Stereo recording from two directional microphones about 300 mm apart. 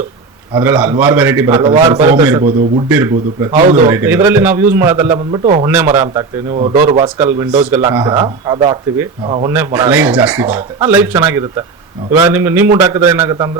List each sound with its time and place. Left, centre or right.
0.5 s a man's voice: centre; by 2.8 s right
2.9 s a man's voice: centre
5.6 s speech: centre
6.5 s a man's voice: right
7.0 s speech: centre